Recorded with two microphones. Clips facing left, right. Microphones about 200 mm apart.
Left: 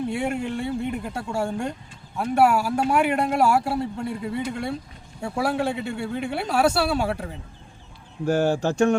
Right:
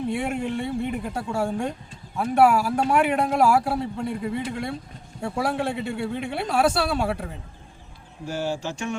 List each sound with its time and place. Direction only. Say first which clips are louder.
0.0 s speech: even; centre (ahead or behind)
8.3 s speech: left 7 dB; 55° left (ahead or behind)